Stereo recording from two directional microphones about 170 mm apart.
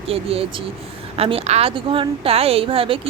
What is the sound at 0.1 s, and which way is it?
Speech, 35° right (ahead or behind).